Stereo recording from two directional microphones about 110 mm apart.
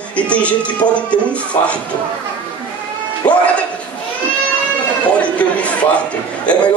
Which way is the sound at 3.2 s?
40° left (ahead or behind).